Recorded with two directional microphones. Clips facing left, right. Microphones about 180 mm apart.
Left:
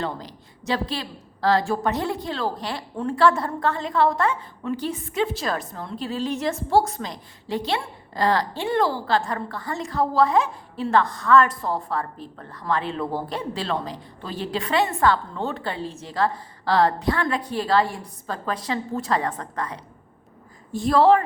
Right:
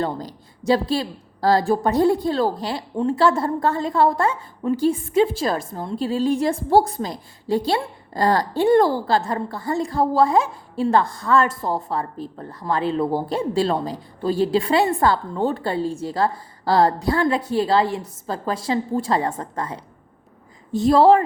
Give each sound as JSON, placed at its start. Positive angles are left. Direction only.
{"t": 0.0, "sound": "a woman's voice", "side_deg": -35}
{"t": 9.0, "sound": "a woman's voice", "side_deg": -30}